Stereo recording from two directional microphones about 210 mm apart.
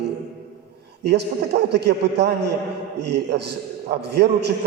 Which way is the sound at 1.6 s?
55° right (ahead or behind).